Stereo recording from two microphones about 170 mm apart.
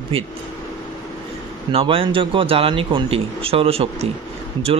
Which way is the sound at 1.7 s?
30° right (ahead or behind).